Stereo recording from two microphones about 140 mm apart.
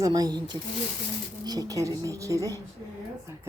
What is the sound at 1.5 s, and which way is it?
A woman's voice, 25° right (ahead or behind).